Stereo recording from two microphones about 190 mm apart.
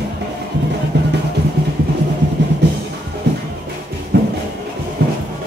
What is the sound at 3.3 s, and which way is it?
Music, 65° right (ahead or behind).